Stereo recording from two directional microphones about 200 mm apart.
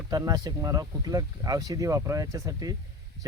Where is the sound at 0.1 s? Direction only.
20° right (ahead or behind).